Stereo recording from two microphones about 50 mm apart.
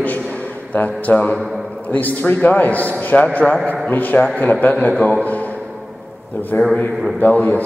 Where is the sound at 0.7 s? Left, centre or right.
Left.